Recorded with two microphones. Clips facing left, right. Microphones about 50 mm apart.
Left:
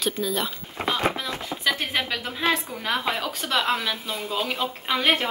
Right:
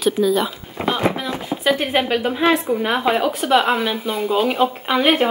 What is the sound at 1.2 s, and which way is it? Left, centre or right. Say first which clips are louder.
Speech: right 6 dB; centre.